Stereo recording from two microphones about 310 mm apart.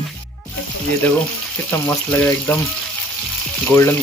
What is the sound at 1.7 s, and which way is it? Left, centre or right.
Speech, centre.